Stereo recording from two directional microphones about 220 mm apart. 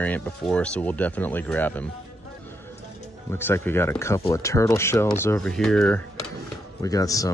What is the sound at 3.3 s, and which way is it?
Speech, 10° left (ahead or behind).